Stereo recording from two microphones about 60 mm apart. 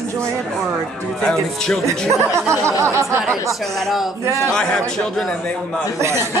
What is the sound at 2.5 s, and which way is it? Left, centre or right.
Speech, right.